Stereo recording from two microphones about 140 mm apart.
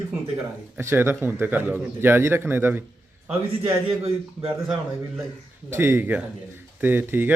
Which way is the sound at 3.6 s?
40° right (ahead or behind).